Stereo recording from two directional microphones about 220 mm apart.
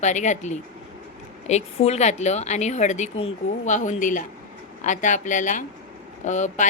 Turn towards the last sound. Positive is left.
turn(degrees=35)  # may be behind; listen again after turning